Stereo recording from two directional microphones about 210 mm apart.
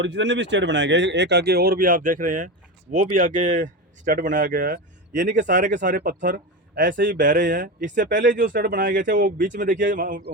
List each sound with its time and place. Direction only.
0.0 s speech: 60° right (ahead or behind); by 6.9 s 40° right (ahead or behind)
6.9 s speech: 55° right (ahead or behind)
7.2 s speech: 40° right (ahead or behind)